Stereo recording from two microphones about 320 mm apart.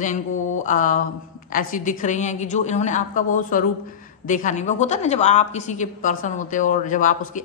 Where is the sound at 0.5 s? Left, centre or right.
Left.